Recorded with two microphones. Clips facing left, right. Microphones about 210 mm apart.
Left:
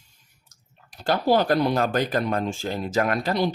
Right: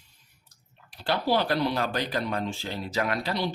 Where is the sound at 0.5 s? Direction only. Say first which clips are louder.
Left 3 dB; 45° left (ahead or behind).